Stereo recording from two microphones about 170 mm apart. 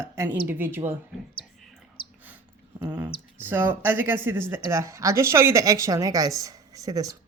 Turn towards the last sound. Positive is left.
turn(degrees=-20)  # may be behind; listen again after turning